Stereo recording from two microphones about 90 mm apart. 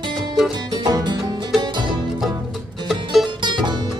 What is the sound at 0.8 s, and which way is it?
Music, 50° right (ahead or behind).